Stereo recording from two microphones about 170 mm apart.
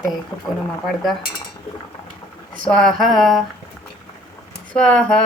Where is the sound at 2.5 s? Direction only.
5° left (ahead or behind).